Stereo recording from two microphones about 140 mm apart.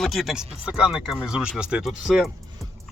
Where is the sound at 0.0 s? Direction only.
Centre (ahead or behind).